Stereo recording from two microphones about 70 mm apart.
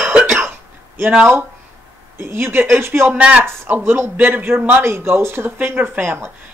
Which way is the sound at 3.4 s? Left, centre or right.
Right.